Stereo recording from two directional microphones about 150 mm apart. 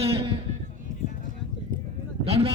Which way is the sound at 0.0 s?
40° right (ahead or behind).